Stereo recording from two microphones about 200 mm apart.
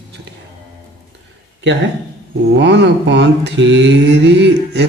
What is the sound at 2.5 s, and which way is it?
Mantra, 65° right (ahead or behind).